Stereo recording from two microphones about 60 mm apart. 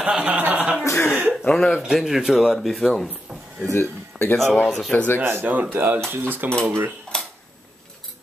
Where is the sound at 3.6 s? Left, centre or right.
Left.